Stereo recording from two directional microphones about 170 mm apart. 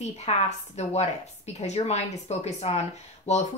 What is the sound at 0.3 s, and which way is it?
Speech, 35° left (ahead or behind).